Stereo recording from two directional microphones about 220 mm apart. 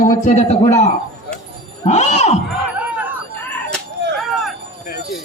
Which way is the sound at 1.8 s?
30° left (ahead or behind).